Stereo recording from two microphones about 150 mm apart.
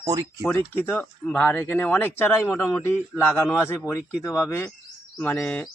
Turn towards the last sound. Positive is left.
turn(degrees=15)  # may be behind; listen again after turning